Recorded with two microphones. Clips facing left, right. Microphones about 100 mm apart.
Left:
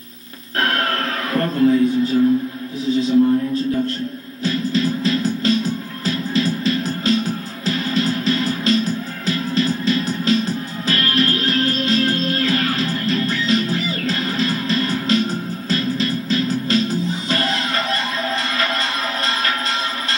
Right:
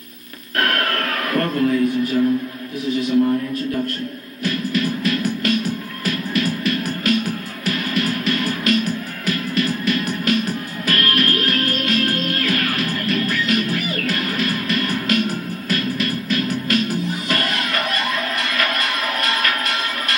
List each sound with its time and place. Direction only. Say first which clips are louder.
0.6 s music: even; 25° left (ahead or behind)
2.9 s speech: left 3 dB; 25° left (ahead or behind)
4.4 s music: left 2 dB; 25° left (ahead or behind)